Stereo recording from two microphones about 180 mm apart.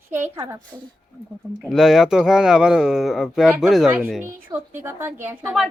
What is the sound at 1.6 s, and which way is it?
Speech, centre (ahead or behind).